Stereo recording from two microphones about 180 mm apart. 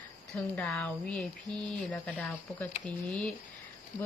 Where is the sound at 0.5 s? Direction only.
5° left (ahead or behind).